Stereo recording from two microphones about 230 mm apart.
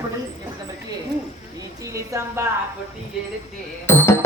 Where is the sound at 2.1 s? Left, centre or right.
Centre.